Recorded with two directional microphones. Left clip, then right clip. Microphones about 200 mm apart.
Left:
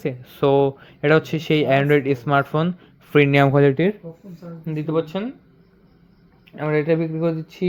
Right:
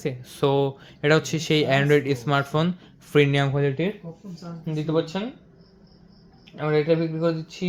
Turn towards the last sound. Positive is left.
turn(degrees=60)  # may be behind; listen again after turning